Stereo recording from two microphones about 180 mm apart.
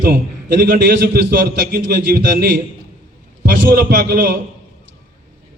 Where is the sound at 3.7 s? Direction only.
55° right (ahead or behind).